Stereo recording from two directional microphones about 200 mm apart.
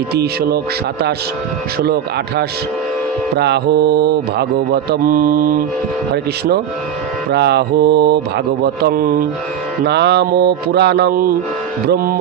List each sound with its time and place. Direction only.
0.1 s mantra: 55° right (ahead or behind)
1.8 s mantra: 55° right (ahead or behind)
7.3 s mantra: 55° right (ahead or behind)